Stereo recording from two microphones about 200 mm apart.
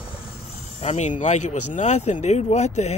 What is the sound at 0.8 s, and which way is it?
Speech, 35° left (ahead or behind).